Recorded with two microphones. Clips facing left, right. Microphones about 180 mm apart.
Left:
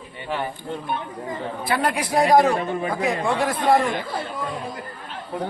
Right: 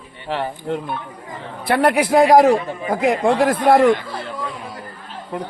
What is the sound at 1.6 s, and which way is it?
A man's voice, 60° right (ahead or behind).